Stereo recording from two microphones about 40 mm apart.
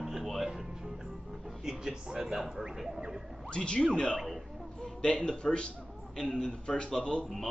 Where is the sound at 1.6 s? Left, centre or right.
Centre.